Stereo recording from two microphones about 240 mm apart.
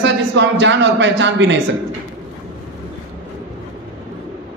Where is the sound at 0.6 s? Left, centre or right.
Right.